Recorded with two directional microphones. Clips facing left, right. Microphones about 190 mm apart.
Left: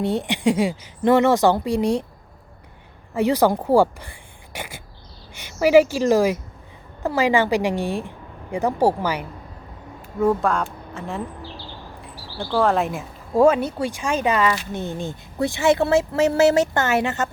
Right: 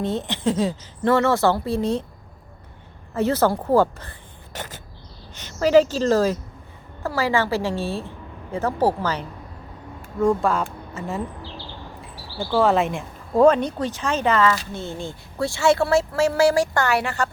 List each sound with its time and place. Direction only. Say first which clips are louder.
0.0 s a woman's voice: left 3 dB; 15° left (ahead or behind)
3.2 s a woman's voice: left 2 dB; 15° left (ahead or behind)
4.5 s a sound: left 1 dB; 10° left (ahead or behind)
5.3 s a woman's voice: left 2 dB; 10° left (ahead or behind)
12.4 s a woman's voice: right 1 dB; centre (ahead or behind); by 17.2 s 20° left (ahead or behind)